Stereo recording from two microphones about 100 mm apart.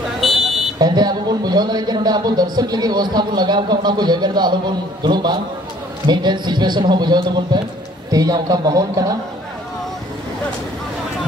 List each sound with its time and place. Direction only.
0.2 s car alarm: centre (ahead or behind)
0.7 s a man's voice: 45° right (ahead or behind)